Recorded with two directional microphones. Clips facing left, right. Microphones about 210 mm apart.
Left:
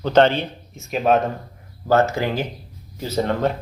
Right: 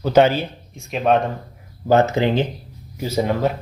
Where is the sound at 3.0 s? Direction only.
10° right (ahead or behind).